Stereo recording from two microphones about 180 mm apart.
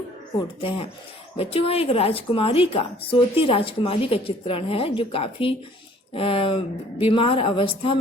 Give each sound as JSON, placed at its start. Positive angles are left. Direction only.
{"t": 1.4, "sound": "a woman's voice", "side_deg": 30}